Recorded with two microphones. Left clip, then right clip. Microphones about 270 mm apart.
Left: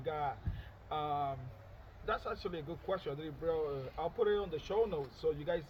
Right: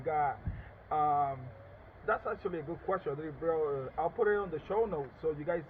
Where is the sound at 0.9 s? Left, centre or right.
Left.